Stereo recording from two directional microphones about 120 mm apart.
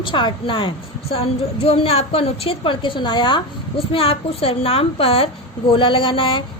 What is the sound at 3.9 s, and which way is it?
A woman's voice, 55° left (ahead or behind).